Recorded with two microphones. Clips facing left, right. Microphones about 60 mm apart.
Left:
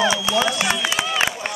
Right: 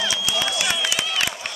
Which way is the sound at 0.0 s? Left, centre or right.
Left.